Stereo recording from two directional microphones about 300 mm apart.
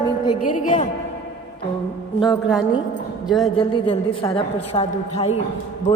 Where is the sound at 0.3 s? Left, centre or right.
Left.